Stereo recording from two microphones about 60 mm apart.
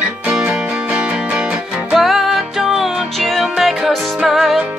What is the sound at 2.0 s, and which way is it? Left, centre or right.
Music, centre.